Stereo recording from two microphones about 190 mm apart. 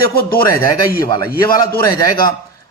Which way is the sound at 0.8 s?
50° left (ahead or behind).